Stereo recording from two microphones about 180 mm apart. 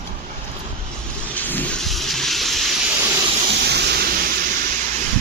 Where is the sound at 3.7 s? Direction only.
65° right (ahead or behind).